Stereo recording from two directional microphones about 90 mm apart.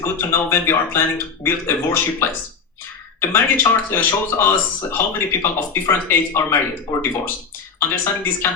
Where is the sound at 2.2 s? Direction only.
25° left (ahead or behind).